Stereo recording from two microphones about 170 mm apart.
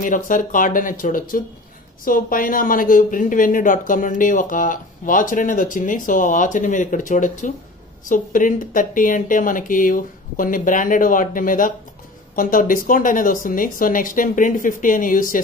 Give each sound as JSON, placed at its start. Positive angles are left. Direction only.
{"t": 0.0, "sound": "speech", "side_deg": 50}